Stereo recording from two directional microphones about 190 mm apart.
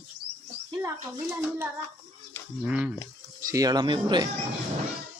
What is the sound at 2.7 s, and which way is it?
Speech, 5° right (ahead or behind).